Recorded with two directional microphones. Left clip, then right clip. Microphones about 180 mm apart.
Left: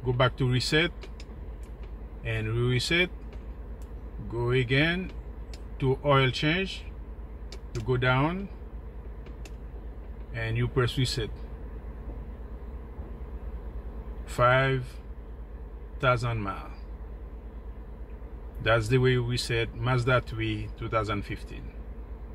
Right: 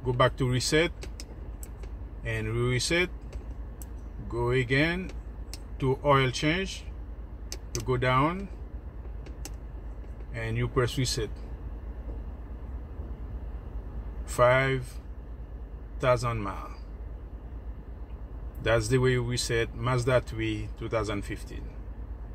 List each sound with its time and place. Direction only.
0.0 s speech: 5° left (ahead or behind)
2.2 s speech: 10° left (ahead or behind)
4.4 s speech: 5° left (ahead or behind)
7.9 s speech: 5° left (ahead or behind)
10.3 s speech: 10° left (ahead or behind)
14.3 s speech: 5° left (ahead or behind)
16.0 s speech: 5° left (ahead or behind)
18.6 s speech: 5° left (ahead or behind)